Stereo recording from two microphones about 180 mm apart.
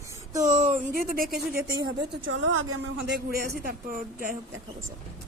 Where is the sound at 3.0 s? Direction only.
65° right (ahead or behind).